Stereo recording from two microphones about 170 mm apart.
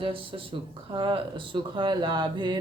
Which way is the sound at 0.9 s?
30° right (ahead or behind).